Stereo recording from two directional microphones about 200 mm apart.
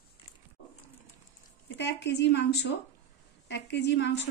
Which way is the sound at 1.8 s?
60° left (ahead or behind).